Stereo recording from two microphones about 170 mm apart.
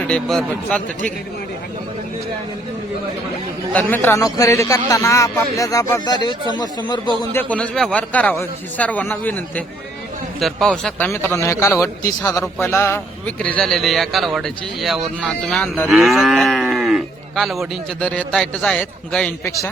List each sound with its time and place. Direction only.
0.1 s a man's voice: 5° left (ahead or behind)
3.7 s a man's voice: 10° left (ahead or behind); by 7.3 s 25° left (ahead or behind)
7.3 s a man's voice: 10° left (ahead or behind)
19.5 s a man's voice: 20° left (ahead or behind)